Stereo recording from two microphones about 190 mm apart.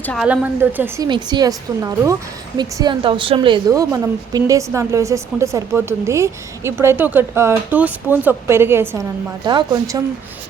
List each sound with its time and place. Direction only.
0.0 s a woman's voice: 5° left (ahead or behind)
0.3 s a woman's voice: 10° right (ahead or behind)
1.0 s a woman's voice: 20° right (ahead or behind)